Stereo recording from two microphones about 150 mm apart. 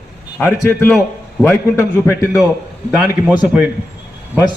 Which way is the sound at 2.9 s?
10° right (ahead or behind).